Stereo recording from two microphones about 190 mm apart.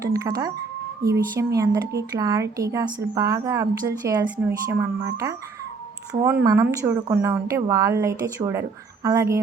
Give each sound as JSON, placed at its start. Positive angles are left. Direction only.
{"t": 0.1, "sound": "a woman's voice", "side_deg": -20}
{"t": 6.4, "sound": "a woman's voice", "side_deg": -15}